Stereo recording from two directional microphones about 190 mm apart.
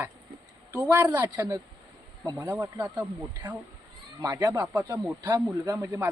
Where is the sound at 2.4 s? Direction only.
10° right (ahead or behind).